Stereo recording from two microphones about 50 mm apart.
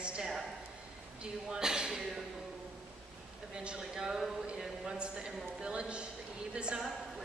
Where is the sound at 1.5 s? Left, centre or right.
Centre.